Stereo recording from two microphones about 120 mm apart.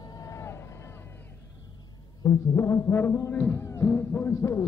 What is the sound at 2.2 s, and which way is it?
Music, 25° left (ahead or behind).